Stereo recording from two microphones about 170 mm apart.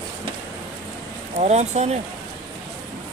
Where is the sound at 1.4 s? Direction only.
40° right (ahead or behind).